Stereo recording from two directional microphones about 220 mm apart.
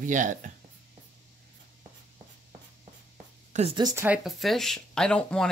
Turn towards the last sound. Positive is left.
turn(degrees=5)  # may be behind; listen again after turning